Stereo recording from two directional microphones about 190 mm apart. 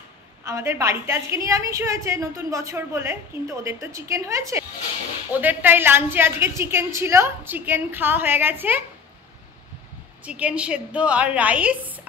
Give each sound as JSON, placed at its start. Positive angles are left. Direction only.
{"t": 0.5, "sound": "a woman's voice", "side_deg": -15}
{"t": 10.2, "sound": "a woman's voice", "side_deg": -5}